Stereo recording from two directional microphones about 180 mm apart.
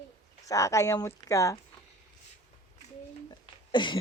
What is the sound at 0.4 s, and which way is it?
Speech, 15° left (ahead or behind).